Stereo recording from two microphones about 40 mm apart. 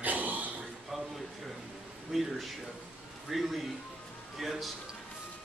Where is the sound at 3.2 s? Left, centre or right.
Centre.